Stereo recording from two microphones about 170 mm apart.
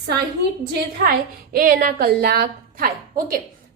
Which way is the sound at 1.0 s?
60° right (ahead or behind).